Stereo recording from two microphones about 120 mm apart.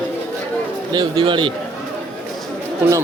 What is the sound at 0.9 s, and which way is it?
Speech, 40° right (ahead or behind).